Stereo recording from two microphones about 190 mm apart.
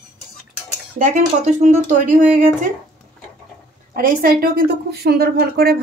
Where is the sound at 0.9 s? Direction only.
40° right (ahead or behind).